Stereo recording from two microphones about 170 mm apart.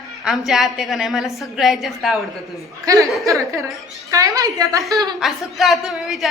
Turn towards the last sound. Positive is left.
turn(degrees=0)  # may be behind; listen again after turning